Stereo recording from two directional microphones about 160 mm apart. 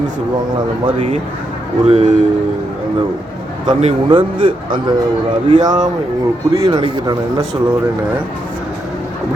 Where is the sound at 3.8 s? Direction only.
35° right (ahead or behind).